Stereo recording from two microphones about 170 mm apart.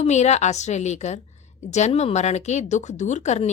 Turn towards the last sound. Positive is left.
turn(degrees=40)  # may be behind; listen again after turning